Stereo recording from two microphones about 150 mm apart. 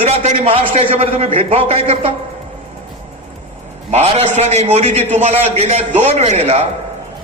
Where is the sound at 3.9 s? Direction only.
45° right (ahead or behind).